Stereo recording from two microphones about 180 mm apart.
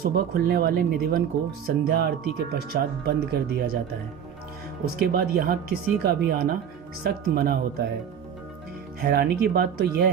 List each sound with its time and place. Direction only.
0.0 s speech: 60° right (ahead or behind)
4.9 s speech: 60° right (ahead or behind)
9.0 s speech: 60° right (ahead or behind)